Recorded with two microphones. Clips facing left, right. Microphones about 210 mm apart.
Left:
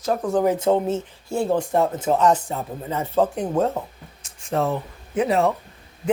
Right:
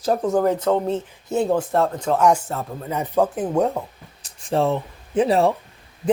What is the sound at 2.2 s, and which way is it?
Speech, 10° right (ahead or behind).